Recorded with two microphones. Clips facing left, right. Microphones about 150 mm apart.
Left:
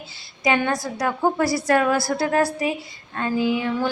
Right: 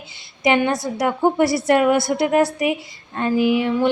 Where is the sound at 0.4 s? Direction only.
20° right (ahead or behind).